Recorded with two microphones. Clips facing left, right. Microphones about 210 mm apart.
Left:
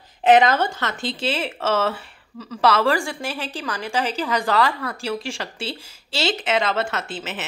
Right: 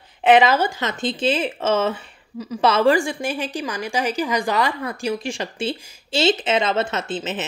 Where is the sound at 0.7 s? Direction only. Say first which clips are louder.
Right 3 dB; 20° right (ahead or behind).